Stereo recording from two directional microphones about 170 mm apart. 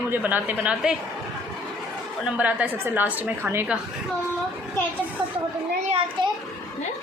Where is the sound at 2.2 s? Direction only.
10° right (ahead or behind).